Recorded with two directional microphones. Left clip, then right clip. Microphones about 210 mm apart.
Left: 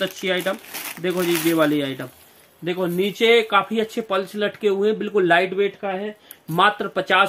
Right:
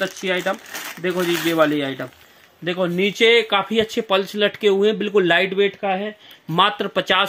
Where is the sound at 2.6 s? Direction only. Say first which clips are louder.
Right 2 dB; 35° right (ahead or behind).